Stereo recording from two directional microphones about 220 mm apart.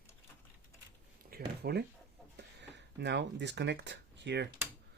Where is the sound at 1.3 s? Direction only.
45° right (ahead or behind).